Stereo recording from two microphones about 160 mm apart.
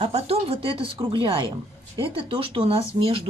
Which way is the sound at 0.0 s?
40° right (ahead or behind).